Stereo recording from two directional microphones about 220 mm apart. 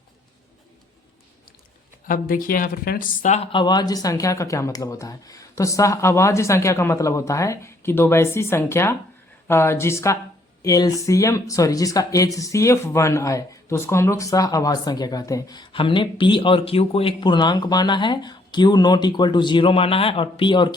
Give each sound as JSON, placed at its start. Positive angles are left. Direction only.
{"t": 2.0, "sound": "speech", "side_deg": 40}